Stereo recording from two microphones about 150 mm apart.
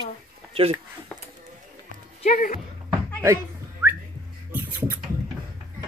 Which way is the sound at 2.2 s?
60° left (ahead or behind).